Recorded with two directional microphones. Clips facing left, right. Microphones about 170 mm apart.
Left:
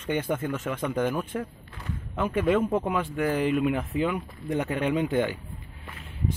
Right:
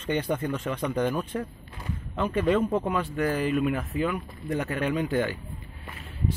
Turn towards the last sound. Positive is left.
turn(degrees=20)  # may be behind; listen again after turning